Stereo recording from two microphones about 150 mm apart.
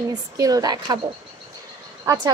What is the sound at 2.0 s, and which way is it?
Speech, 25° right (ahead or behind).